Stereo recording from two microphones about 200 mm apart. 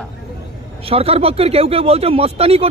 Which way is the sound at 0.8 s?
30° right (ahead or behind).